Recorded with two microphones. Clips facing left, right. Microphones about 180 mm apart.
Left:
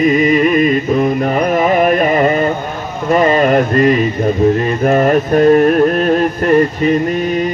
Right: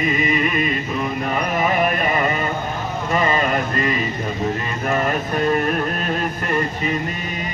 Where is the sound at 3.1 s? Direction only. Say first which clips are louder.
Left 10 dB; 45° left (ahead or behind).